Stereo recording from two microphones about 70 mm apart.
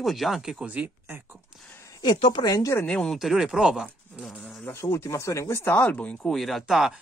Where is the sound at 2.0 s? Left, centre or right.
Left.